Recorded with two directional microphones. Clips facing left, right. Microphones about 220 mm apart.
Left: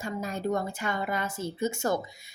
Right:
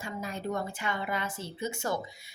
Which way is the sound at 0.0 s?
45° left (ahead or behind).